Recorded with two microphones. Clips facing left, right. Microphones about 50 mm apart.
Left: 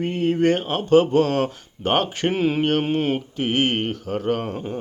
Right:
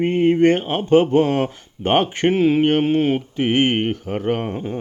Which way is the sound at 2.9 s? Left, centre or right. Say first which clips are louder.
Right 4 dB; centre.